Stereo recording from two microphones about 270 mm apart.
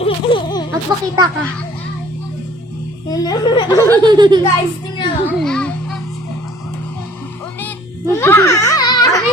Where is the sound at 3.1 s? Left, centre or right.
Centre.